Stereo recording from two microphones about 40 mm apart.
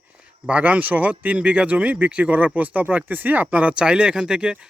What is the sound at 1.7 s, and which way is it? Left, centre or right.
Speech, right.